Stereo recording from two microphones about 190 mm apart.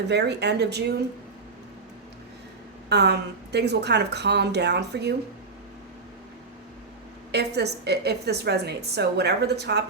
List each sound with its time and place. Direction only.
0.1 s a woman's voice: 60° right (ahead or behind)
2.9 s a woman's voice: 60° right (ahead or behind)
7.3 s a woman's voice: 60° right (ahead or behind)